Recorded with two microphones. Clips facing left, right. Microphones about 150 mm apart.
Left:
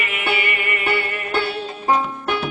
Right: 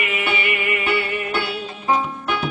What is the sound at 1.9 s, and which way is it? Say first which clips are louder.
Music: left 1 dB; 45° left (ahead or behind).